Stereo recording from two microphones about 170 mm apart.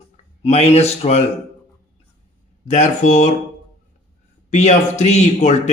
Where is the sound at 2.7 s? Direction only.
45° left (ahead or behind).